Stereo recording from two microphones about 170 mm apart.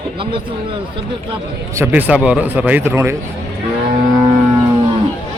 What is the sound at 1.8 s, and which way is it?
Speech, 10° right (ahead or behind).